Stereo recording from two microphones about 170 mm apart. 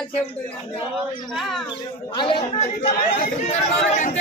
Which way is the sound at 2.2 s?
30° left (ahead or behind).